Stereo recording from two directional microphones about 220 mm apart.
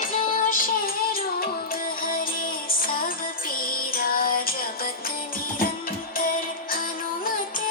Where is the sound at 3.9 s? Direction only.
40° left (ahead or behind).